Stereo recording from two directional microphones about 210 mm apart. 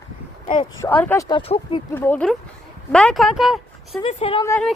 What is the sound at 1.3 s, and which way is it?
Speech, 25° left (ahead or behind).